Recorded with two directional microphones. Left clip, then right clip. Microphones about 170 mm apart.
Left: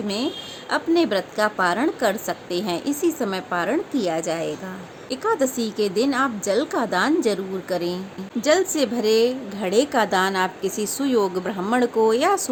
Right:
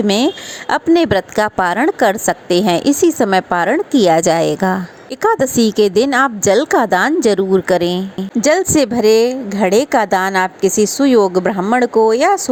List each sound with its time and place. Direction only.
0.7 s a woman's voice: 45° right (ahead or behind)